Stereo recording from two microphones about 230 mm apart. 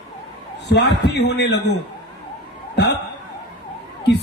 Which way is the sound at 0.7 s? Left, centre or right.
Left.